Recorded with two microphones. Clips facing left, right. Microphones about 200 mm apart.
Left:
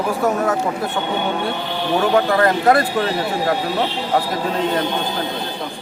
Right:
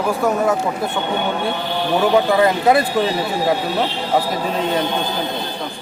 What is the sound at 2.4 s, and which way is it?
Speech, 10° right (ahead or behind).